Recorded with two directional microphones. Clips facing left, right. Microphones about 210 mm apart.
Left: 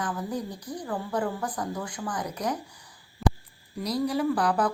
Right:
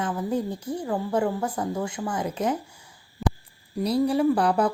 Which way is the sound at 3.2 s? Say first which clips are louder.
Left 1 dB; centre (ahead or behind).